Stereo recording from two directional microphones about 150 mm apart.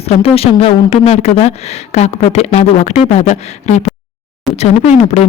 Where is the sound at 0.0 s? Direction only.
40° left (ahead or behind).